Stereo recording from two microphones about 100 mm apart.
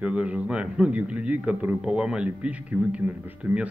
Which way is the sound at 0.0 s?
15° right (ahead or behind).